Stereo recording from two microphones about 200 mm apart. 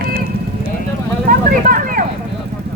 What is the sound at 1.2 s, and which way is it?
Vehicle, 45° right (ahead or behind).